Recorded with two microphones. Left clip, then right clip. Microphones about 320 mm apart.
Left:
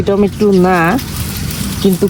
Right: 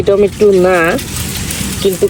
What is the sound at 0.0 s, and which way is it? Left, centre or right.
Speech, centre.